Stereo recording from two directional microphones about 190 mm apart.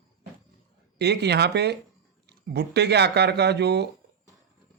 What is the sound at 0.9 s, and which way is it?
Speech, 60° right (ahead or behind).